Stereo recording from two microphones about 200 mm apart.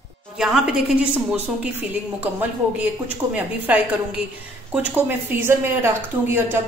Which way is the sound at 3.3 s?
10° right (ahead or behind).